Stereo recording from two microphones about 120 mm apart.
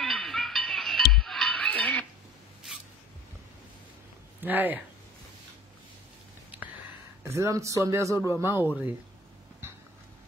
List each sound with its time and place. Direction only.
0.0 s a sound: centre (ahead or behind)
4.4 s speech: 15° right (ahead or behind)
7.2 s speech: 25° right (ahead or behind)